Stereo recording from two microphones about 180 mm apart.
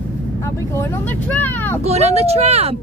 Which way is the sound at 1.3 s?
10° left (ahead or behind).